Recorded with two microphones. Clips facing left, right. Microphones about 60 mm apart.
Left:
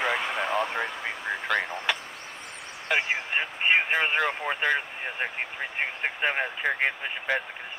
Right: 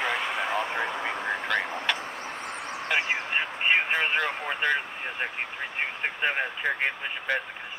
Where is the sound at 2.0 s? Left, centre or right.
Right.